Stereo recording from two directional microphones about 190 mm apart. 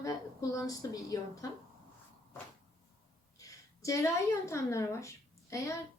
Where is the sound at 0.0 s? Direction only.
15° left (ahead or behind).